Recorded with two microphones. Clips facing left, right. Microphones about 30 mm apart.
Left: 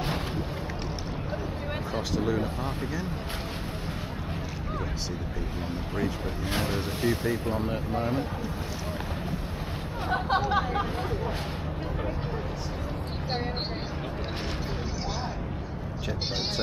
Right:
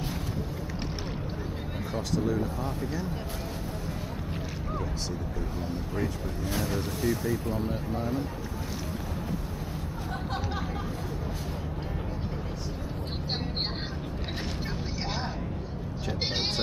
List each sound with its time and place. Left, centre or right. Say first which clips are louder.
2.2 s speech: left 1 dB; left
6.5 s speech: left 2 dB; left
10.1 s speech: left 10 dB; left